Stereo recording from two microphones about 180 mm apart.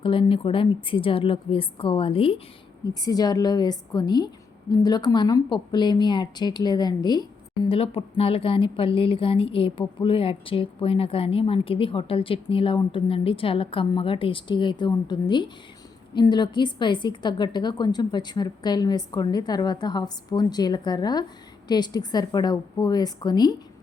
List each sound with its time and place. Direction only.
0.0 s speech: 30° left (ahead or behind)